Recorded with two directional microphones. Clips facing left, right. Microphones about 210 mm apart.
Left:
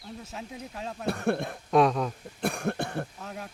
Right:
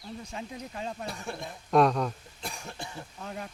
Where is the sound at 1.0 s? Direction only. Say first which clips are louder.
Left 9 dB; 60° left (ahead or behind).